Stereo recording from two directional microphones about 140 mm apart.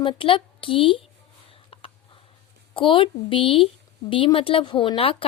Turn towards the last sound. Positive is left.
turn(degrees=40)  # may be behind; listen again after turning